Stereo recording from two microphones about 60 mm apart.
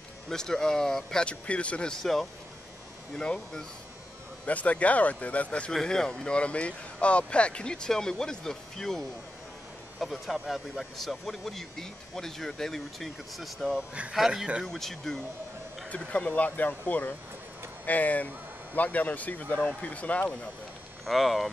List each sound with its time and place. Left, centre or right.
0.3 s speech: centre
3.2 s speech: centre
4.5 s speech: left; by 14.7 s centre
14.7 s speech: centre
15.9 s speech: left
21.0 s speech: centre